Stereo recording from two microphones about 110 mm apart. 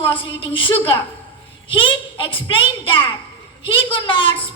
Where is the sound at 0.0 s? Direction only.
50° left (ahead or behind).